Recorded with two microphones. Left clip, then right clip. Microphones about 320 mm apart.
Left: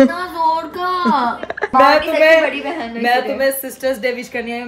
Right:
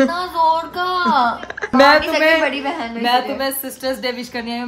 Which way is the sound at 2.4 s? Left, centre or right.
Centre.